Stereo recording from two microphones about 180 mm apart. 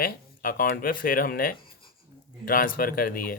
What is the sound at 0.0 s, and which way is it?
Speech, 55° left (ahead or behind).